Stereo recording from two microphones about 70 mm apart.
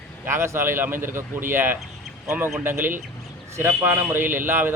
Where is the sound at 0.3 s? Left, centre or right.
Right.